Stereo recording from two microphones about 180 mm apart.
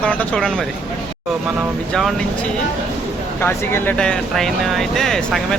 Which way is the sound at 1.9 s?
5° left (ahead or behind).